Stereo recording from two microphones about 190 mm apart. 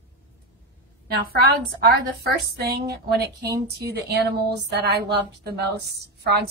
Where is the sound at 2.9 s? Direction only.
60° right (ahead or behind).